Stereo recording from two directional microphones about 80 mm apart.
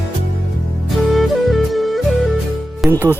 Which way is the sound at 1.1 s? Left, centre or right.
Centre.